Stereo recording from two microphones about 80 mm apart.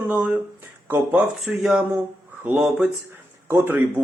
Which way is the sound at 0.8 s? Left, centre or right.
Right.